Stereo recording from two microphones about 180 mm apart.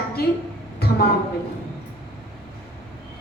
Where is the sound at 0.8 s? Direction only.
60° left (ahead or behind).